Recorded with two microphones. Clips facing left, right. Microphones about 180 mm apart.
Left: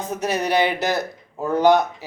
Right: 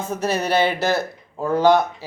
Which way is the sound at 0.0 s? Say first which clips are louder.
Right 1 dB; 15° left (ahead or behind).